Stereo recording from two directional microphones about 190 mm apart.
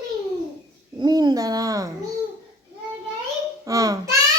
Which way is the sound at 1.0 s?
20° right (ahead or behind).